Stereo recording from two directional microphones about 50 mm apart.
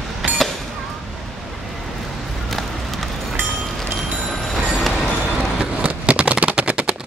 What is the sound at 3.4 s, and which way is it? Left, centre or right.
Train, centre.